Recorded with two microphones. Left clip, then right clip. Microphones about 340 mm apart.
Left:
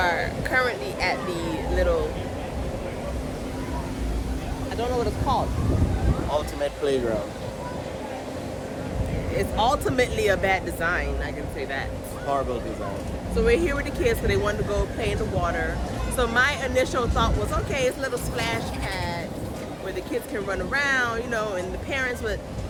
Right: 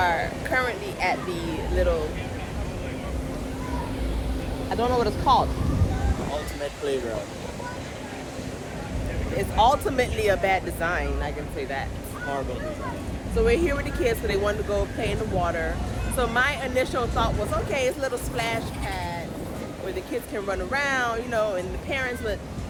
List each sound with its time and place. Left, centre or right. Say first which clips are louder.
0.0 s speech: even; centre
4.7 s speech: right 3 dB; right
9.4 s speech: right 3 dB; centre
13.3 s speech: even; centre
20.3 s speech: even; centre